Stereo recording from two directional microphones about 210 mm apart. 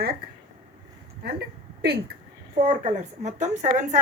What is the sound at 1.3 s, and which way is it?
Speech, 50° right (ahead or behind).